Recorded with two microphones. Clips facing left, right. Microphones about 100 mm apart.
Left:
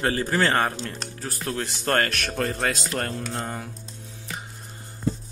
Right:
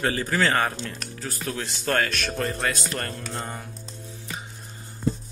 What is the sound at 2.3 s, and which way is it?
Speech, 70° left (ahead or behind).